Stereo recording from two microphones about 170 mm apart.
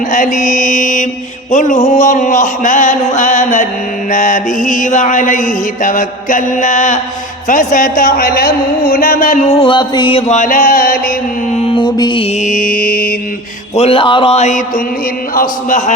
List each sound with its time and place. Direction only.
0.1 s mantra: 45° left (ahead or behind)
11.5 s music: 35° left (ahead or behind)
12.4 s mantra: 50° left (ahead or behind)
13.7 s speech: 35° left (ahead or behind)